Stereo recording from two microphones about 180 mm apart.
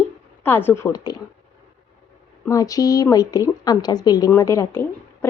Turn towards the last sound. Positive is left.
turn(degrees=15)  # may be behind; listen again after turning